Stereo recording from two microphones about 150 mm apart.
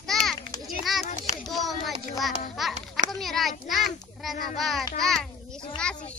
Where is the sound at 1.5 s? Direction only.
Centre (ahead or behind).